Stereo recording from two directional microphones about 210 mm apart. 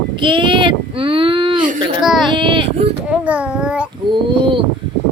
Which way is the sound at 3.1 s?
5° right (ahead or behind).